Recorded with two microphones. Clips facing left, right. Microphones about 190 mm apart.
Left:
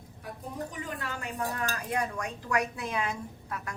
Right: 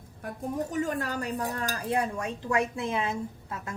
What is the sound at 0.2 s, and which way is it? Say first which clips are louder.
Speech: right 6 dB; 45° right (ahead or behind).